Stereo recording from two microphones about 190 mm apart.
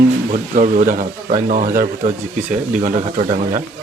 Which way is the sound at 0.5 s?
45° right (ahead or behind).